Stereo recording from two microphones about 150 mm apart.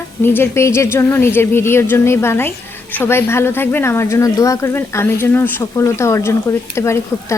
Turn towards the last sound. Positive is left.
turn(degrees=20)  # may be behind; listen again after turning